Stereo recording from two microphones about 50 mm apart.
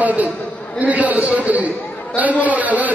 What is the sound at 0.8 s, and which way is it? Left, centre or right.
A man's voice, right.